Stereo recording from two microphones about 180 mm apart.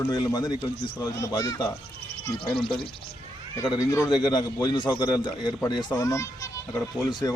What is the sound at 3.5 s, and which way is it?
A man's voice, 20° left (ahead or behind).